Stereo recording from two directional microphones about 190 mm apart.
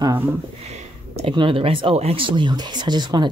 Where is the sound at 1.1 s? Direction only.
30° right (ahead or behind).